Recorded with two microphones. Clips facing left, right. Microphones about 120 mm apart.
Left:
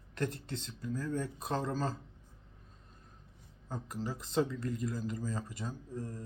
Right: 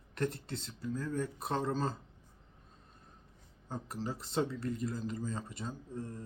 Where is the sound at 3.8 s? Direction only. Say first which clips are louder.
Left 1 dB; 30° right (ahead or behind).